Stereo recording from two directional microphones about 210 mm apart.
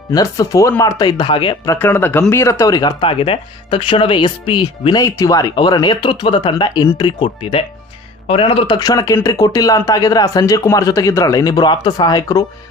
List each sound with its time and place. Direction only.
0.1 s a man's voice: 15° left (ahead or behind)
1.8 s a man's voice: 10° left (ahead or behind)